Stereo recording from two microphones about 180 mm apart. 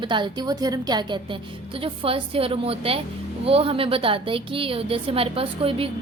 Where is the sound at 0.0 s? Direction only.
25° right (ahead or behind).